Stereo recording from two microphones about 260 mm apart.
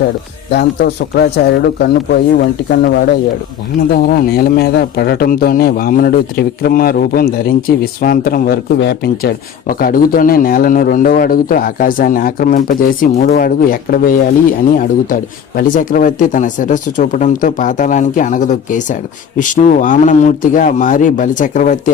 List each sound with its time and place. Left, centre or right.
0.5 s speech: left